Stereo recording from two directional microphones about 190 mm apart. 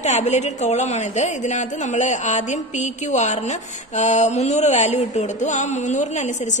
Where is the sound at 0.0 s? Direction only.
35° left (ahead or behind).